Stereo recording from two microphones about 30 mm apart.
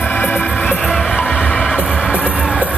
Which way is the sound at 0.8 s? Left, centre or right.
Centre.